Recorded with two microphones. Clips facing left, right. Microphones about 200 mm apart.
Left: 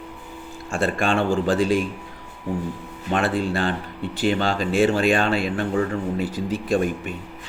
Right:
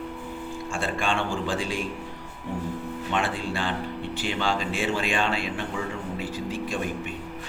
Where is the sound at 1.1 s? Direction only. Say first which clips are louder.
Left 7 dB; 40° left (ahead or behind).